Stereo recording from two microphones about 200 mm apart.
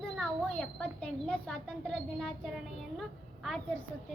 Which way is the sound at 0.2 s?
5° left (ahead or behind).